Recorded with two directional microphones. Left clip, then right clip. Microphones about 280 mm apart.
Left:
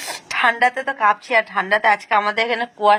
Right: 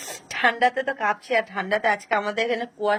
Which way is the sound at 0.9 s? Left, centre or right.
Centre.